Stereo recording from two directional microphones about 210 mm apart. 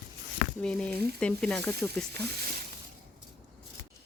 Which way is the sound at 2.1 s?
50° right (ahead or behind).